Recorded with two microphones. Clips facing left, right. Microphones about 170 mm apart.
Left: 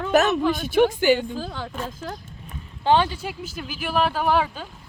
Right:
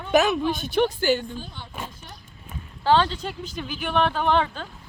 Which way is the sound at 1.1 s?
90° left.